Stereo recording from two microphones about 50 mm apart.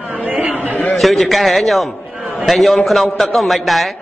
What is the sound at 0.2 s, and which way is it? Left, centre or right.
Chatter, right.